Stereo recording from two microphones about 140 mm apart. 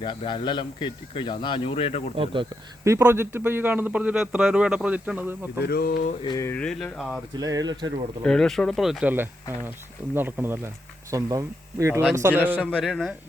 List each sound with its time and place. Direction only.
0.0 s speech: 35° left (ahead or behind)
2.1 s speech: 40° right (ahead or behind)
2.8 s speech: 20° right (ahead or behind)
5.7 s mantra: 90° left
6.4 s speech: 10° left (ahead or behind)
7.3 s speech: 25° right (ahead or behind)
8.2 s speech: 5° left (ahead or behind); by 12.4 s 20° right (ahead or behind)
12.5 s speech: 5° left (ahead or behind)